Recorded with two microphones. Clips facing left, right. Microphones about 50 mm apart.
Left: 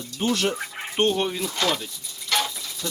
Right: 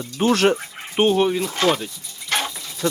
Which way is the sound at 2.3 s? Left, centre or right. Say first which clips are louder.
Right 1 dB; right.